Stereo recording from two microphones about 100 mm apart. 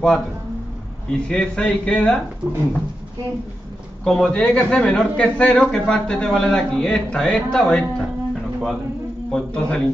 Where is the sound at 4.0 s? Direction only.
Centre (ahead or behind).